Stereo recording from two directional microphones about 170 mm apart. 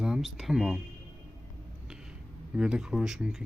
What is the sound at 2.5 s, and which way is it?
Speech, 5° right (ahead or behind).